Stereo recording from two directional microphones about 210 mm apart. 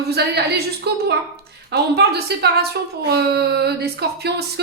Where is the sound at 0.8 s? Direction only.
50° right (ahead or behind).